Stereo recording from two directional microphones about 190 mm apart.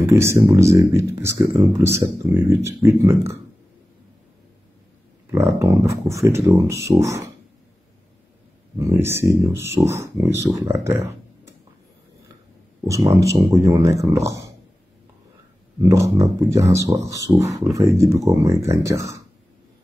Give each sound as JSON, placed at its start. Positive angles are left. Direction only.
{"t": 0.0, "sound": "speech", "side_deg": -15}
{"t": 5.6, "sound": "speech", "side_deg": -15}
{"t": 8.7, "sound": "speech", "side_deg": -15}
{"t": 12.8, "sound": "speech", "side_deg": -15}
{"t": 15.8, "sound": "speech", "side_deg": -15}